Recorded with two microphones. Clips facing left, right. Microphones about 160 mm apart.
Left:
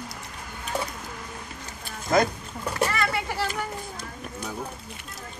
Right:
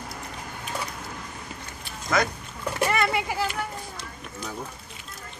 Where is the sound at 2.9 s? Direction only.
20° right (ahead or behind).